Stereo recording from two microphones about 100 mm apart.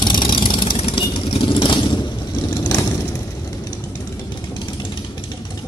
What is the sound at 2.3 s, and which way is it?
Vehicle, 30° left (ahead or behind).